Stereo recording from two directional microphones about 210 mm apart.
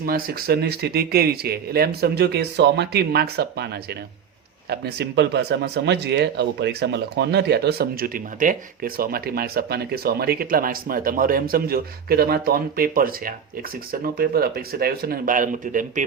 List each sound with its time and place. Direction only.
0.0 s speech: 45° right (ahead or behind)
4.7 s speech: 50° right (ahead or behind)